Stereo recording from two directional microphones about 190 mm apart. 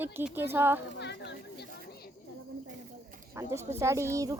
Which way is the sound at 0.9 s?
65° left (ahead or behind).